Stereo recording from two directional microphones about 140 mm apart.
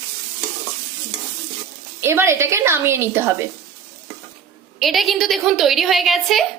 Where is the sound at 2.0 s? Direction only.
20° right (ahead or behind).